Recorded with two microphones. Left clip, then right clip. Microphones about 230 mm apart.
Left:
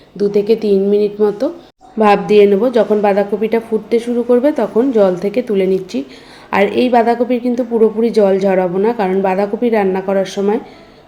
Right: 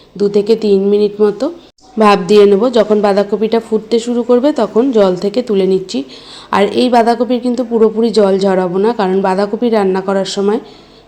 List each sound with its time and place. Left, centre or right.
0.2 s speech: centre